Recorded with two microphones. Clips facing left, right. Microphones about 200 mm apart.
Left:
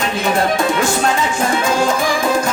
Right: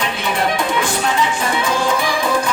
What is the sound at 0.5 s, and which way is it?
Music, 45° left (ahead or behind).